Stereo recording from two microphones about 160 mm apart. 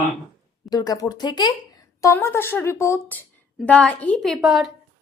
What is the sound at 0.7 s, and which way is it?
Speech, 25° left (ahead or behind).